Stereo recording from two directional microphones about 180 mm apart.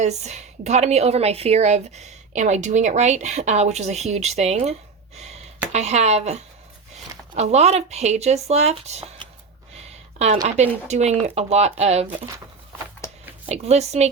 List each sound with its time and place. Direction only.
0.0 s a woman's voice: 40° right (ahead or behind)
5.7 s a woman's voice: 35° right (ahead or behind)
10.4 s a woman's voice: 40° right (ahead or behind)
13.0 s a sound: 15° left (ahead or behind)
13.5 s a woman's voice: 35° right (ahead or behind)